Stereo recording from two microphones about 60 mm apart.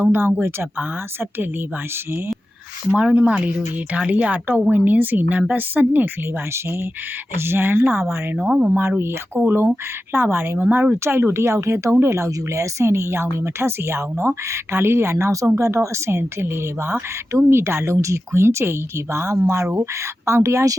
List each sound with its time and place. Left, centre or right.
0.0 s speech: right
2.9 s speech: centre
6.5 s a woman's voice: right
8.4 s speech: right
8.8 s a woman's voice: right
10.6 s speech: right
11.0 s a woman's voice: right